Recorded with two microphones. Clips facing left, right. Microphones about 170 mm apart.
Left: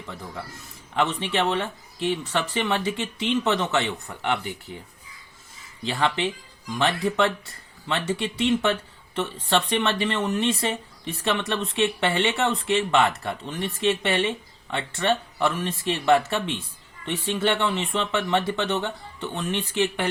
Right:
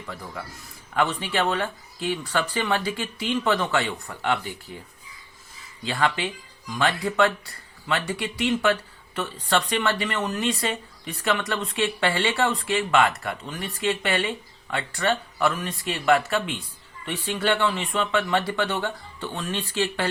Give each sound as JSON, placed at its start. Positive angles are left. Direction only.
{"t": 0.9, "sound": "speech", "side_deg": 25}
{"t": 5.8, "sound": "speech", "side_deg": 20}